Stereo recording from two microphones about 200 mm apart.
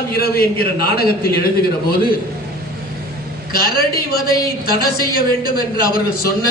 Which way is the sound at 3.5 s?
50° left (ahead or behind).